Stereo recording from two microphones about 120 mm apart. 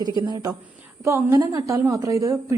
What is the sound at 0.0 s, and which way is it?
A woman's voice, 30° right (ahead or behind).